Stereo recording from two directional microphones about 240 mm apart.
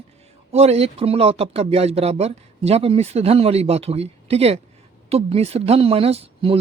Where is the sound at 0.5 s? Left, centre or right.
Right.